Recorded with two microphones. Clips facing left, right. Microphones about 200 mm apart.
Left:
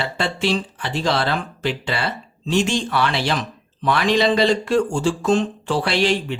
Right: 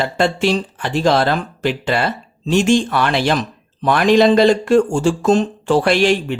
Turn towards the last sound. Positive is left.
turn(degrees=-50)  # may be behind; listen again after turning